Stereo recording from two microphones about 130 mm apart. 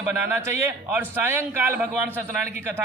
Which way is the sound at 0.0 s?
20° right (ahead or behind).